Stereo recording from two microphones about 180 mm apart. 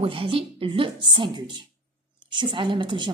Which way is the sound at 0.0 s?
30° right (ahead or behind).